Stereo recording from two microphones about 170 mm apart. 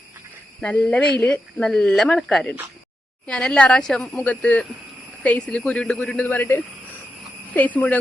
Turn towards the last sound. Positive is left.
turn(degrees=10)  # may be behind; listen again after turning